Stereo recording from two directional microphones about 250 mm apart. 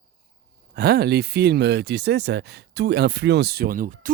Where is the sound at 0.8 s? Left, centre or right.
Right.